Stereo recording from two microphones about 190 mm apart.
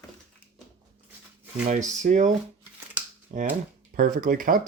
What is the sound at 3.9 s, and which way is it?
Speech, 50° right (ahead or behind).